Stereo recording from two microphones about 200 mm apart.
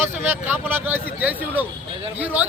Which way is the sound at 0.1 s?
10° right (ahead or behind).